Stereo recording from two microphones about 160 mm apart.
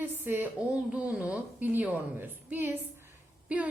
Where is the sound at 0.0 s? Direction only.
15° right (ahead or behind).